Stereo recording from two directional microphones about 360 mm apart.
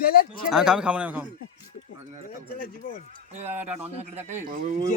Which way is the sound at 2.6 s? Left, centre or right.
Left.